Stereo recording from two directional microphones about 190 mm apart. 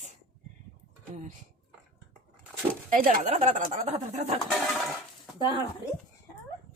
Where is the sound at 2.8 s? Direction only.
45° right (ahead or behind).